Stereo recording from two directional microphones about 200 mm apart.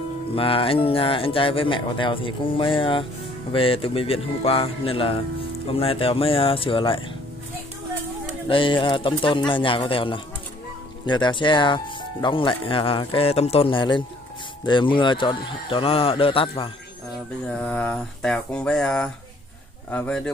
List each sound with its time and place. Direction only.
0.4 s speech: 25° left (ahead or behind)
8.5 s speech: 25° left (ahead or behind)
17.5 s speech: 5° left (ahead or behind)